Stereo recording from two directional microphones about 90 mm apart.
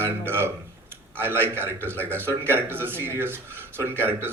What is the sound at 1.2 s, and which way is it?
A man's voice, 25° right (ahead or behind).